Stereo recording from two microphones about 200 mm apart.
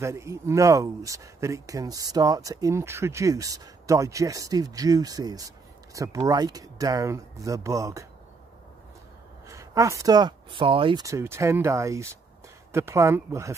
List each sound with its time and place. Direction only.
0.0 s speech: 15° right (ahead or behind)
9.5 s speech: 15° right (ahead or behind)